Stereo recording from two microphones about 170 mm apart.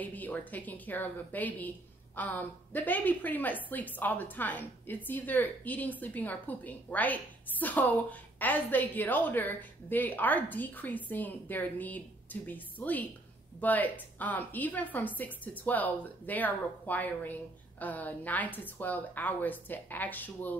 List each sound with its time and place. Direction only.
0.0 s a woman's voice: 10° left (ahead or behind)